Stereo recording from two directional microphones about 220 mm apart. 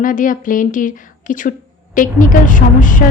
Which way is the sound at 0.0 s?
40° left (ahead or behind).